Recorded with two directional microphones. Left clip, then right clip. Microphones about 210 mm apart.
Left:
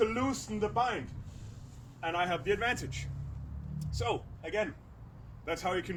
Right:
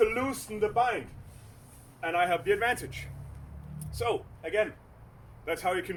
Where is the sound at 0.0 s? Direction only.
5° left (ahead or behind).